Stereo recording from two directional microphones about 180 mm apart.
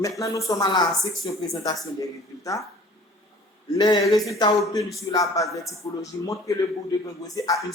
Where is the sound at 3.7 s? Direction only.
25° left (ahead or behind).